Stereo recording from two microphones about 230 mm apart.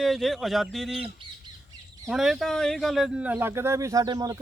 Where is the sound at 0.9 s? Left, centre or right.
Right.